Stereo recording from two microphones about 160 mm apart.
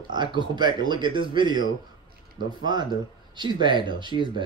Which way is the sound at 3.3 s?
30° right (ahead or behind).